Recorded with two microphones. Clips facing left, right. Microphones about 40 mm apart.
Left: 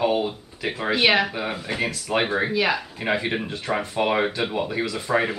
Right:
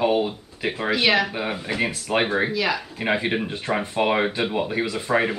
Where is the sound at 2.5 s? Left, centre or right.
Centre.